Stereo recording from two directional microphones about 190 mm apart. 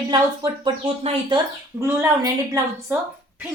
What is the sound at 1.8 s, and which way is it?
A woman's voice, 10° right (ahead or behind).